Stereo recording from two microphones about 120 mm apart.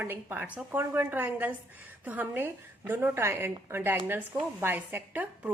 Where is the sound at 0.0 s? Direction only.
15° right (ahead or behind).